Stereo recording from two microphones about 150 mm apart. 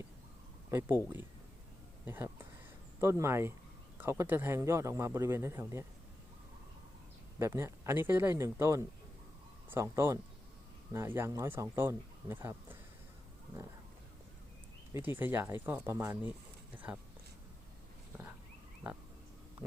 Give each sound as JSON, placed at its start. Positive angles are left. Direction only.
{"t": 0.7, "sound": "speech", "side_deg": -20}
{"t": 7.3, "sound": "speech", "side_deg": -15}
{"t": 14.9, "sound": "speech", "side_deg": -15}